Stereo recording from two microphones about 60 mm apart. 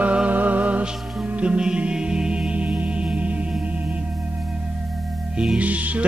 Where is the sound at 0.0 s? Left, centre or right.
Right.